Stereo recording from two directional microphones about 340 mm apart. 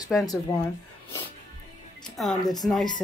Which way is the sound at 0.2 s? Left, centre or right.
Centre.